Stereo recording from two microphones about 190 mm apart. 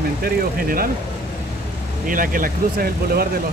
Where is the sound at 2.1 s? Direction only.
45° right (ahead or behind).